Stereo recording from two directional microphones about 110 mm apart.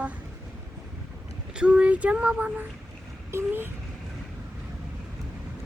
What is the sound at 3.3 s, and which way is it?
Speech, 20° right (ahead or behind).